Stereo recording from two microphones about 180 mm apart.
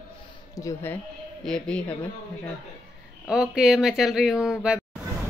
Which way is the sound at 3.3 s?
5° right (ahead or behind).